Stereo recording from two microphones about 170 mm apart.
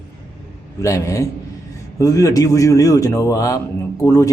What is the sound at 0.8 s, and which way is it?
A man's voice, 20° left (ahead or behind).